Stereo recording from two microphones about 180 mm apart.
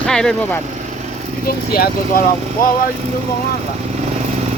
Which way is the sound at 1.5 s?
55° left (ahead or behind).